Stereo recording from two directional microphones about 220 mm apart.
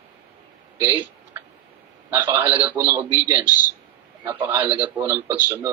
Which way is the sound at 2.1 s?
10° right (ahead or behind).